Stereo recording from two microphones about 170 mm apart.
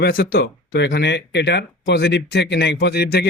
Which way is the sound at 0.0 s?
60° left (ahead or behind).